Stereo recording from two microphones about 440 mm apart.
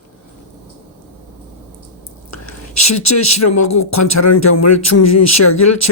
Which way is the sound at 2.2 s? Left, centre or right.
Left.